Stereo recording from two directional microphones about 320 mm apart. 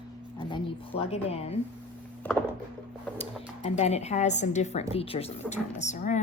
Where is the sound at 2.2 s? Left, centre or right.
Centre.